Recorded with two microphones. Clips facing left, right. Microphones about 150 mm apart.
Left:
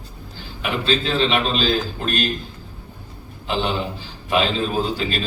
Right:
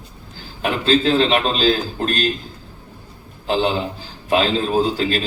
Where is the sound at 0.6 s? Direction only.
40° right (ahead or behind).